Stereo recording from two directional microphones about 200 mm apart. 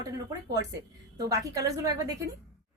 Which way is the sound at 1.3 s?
15° right (ahead or behind).